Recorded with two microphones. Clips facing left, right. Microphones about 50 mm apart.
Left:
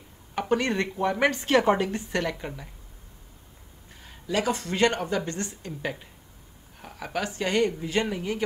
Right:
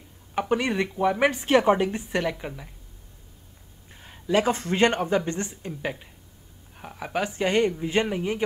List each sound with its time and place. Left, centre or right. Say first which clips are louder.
0.3 s speech: right 1 dB; centre
3.9 s speech: right 5 dB; centre
5.7 s a woman's voice: right 1 dB; centre